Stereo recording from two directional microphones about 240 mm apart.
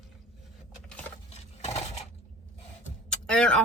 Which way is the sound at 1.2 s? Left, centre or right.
Left.